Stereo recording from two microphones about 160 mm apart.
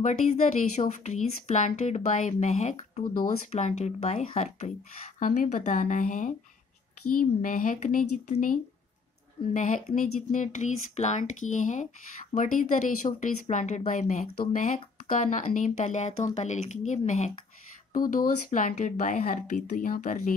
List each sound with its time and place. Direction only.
0.0 s speech: 50° left (ahead or behind)
17.9 s speech: 60° left (ahead or behind)